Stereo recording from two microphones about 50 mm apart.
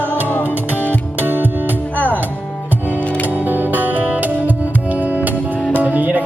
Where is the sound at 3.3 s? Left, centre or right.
Right.